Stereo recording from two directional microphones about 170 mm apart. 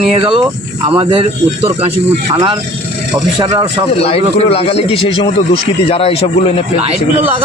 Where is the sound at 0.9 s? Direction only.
30° right (ahead or behind).